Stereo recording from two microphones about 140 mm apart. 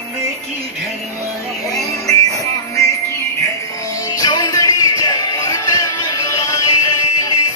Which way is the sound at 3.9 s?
25° left (ahead or behind).